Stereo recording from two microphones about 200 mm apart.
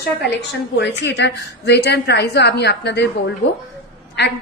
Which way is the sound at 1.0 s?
60° left (ahead or behind).